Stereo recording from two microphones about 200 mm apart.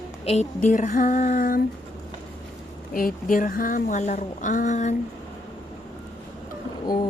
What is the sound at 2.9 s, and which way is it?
Speech, 45° left (ahead or behind).